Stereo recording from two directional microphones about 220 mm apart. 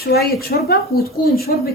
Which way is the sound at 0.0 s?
45° left (ahead or behind).